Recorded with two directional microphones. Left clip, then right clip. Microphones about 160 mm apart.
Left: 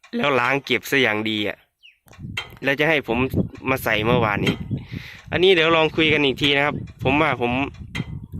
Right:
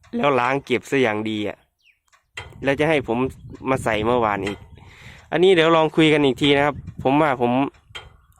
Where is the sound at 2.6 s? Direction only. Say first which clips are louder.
Even; 20° right (ahead or behind).